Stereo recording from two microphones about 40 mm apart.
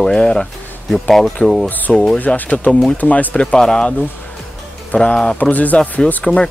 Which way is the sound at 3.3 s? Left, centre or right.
Left.